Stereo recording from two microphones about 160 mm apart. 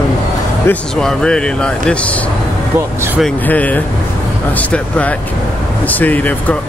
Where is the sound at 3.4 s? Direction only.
10° left (ahead or behind).